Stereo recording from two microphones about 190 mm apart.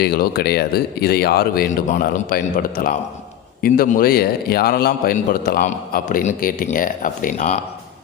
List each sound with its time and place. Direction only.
0.0 s a man's voice: 55° left (ahead or behind)